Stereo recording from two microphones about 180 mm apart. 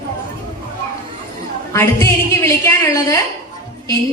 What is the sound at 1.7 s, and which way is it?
A woman's voice, 15° left (ahead or behind).